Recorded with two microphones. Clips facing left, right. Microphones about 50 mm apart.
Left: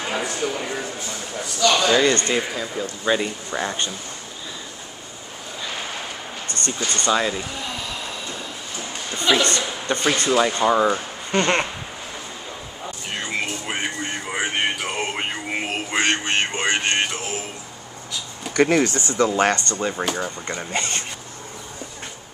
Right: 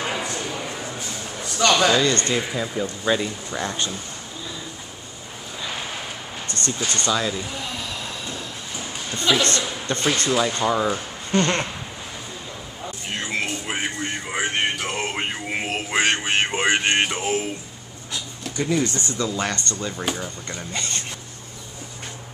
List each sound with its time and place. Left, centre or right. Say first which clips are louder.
0.1 s a sound: left 2 dB; left
1.9 s speech: left 2 dB; centre
2.5 s speech: right 1 dB; centre
3.1 s speech: left 2 dB; centre
6.4 s speech: even; centre
7.4 s a sound: left 1 dB; centre
8.9 s speech: left 1 dB; centre
13.1 s music: even; centre
18.5 s a sound: left 6 dB; left
19.0 s speech: left 6 dB; left
19.5 s speech: left 4 dB; left